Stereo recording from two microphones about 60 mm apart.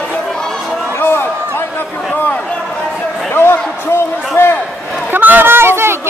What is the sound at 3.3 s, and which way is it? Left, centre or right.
Basketball bounce, left.